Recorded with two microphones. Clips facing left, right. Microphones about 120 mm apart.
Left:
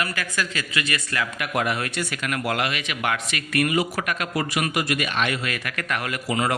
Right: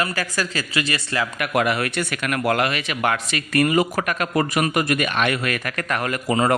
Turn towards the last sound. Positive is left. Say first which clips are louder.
# right 5 dB
turn(degrees=-45)  # may be behind; listen again after turning